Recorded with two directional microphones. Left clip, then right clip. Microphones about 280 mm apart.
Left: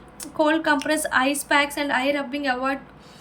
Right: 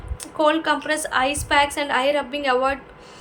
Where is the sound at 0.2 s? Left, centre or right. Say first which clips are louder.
Right 2 dB; centre.